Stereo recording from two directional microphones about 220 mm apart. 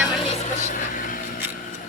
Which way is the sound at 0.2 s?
30° left (ahead or behind).